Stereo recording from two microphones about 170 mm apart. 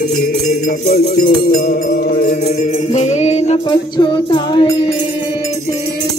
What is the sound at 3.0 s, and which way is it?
Music, 40° left (ahead or behind).